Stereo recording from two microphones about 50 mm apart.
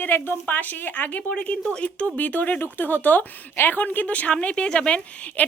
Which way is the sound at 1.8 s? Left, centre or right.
Left.